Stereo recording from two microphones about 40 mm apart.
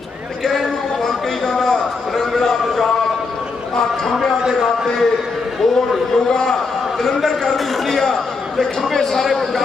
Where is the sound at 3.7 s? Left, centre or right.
Centre.